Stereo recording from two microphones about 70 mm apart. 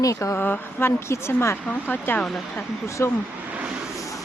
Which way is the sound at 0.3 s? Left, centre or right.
Left.